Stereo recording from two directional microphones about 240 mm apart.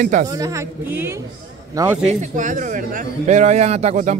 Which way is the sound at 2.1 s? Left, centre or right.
Right.